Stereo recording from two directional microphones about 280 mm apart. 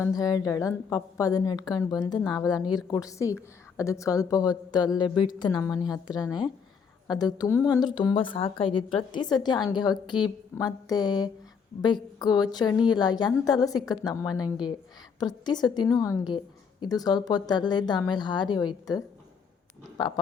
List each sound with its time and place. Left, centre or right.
0.0 s a woman's voice: centre